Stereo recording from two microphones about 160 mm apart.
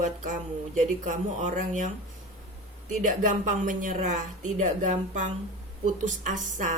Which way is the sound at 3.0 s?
55° right (ahead or behind).